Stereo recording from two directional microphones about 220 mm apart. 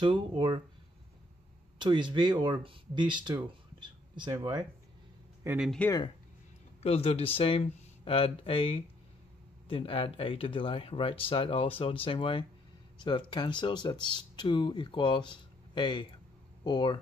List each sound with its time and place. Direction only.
0.0 s speech: 20° right (ahead or behind)
1.8 s speech: 20° right (ahead or behind)
5.7 s speech: 5° left (ahead or behind)
6.8 s speech: 25° left (ahead or behind)